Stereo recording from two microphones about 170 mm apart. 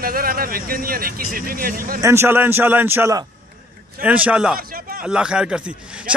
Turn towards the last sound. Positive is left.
turn(degrees=-5)  # may be behind; listen again after turning